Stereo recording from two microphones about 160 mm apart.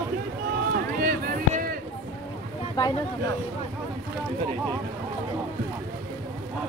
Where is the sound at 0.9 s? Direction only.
60° right (ahead or behind).